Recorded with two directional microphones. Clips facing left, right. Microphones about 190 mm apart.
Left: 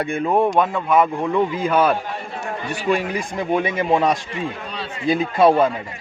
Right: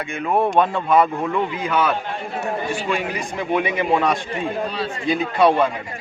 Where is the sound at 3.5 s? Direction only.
40° left (ahead or behind).